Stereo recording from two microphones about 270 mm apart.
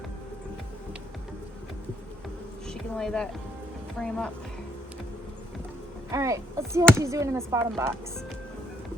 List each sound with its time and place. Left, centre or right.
2.6 s a sound: centre
3.9 s speech: centre
6.1 s speech: centre